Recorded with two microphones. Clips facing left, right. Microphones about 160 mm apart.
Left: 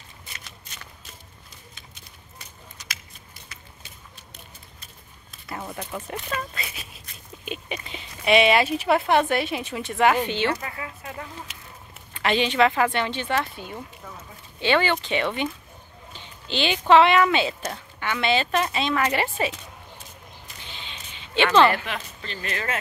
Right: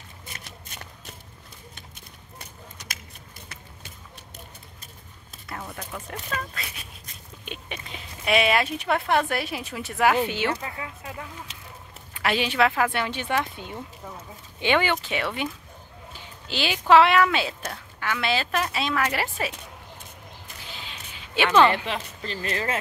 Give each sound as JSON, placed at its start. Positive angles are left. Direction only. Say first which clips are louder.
{"t": 0.4, "sound": "shuffling cards", "louder": "right 2 dB", "side_deg": -60}
{"t": 2.8, "sound": "a sound", "louder": "left 2 dB", "side_deg": -50}
{"t": 5.6, "sound": "speech", "louder": "left 4 dB", "side_deg": 10}
{"t": 12.1, "sound": "a woman's voice", "louder": "left 2 dB", "side_deg": -5}
{"t": 20.6, "sound": "a sound", "louder": "right 1 dB", "side_deg": -5}
{"t": 21.5, "sound": "speech", "louder": "even", "side_deg": -15}
{"t": 22.2, "sound": "speech", "louder": "right 3 dB", "side_deg": -35}